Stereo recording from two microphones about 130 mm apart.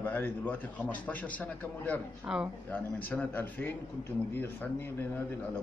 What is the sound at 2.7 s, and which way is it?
A man's voice, 15° left (ahead or behind).